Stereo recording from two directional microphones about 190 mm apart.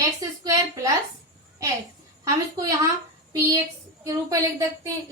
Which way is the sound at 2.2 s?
20° right (ahead or behind).